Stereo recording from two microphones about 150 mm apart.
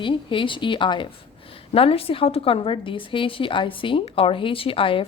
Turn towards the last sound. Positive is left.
turn(degrees=35)  # may be behind; listen again after turning